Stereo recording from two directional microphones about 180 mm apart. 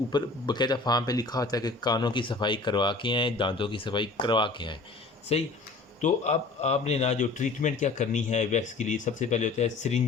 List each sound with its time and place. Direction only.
0.1 s a man's voice: 25° left (ahead or behind); by 10.0 s 40° left (ahead or behind)